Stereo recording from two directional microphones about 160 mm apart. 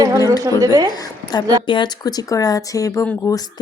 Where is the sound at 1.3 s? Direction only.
25° left (ahead or behind).